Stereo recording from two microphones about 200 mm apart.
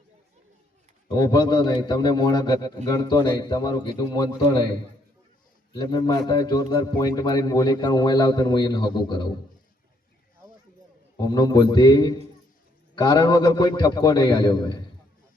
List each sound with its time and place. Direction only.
1.0 s a man's voice: 20° left (ahead or behind)
5.7 s a man's voice: 20° left (ahead or behind)
11.2 s a man's voice: 20° left (ahead or behind)